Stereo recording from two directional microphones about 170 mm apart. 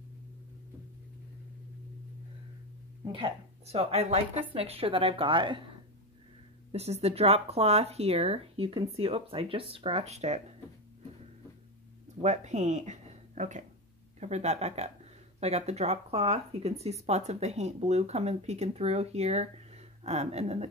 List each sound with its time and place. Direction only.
3.0 s speech: 30° right (ahead or behind)
6.7 s speech: 40° right (ahead or behind)
12.2 s speech: 45° right (ahead or behind)